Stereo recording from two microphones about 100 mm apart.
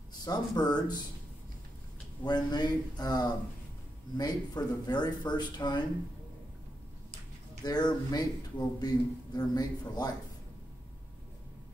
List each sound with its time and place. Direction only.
0.2 s speech: 40° left (ahead or behind)
2.2 s speech: 45° left (ahead or behind)
7.6 s a man's voice: 40° left (ahead or behind)